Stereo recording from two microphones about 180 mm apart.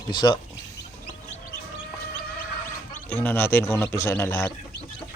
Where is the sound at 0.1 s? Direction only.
25° left (ahead or behind).